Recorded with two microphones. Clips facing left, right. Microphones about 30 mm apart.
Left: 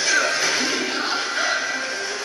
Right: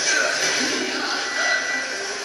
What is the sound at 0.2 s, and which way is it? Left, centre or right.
Music, centre.